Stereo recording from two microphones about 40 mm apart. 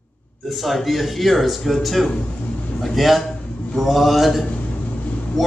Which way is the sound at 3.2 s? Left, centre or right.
Centre.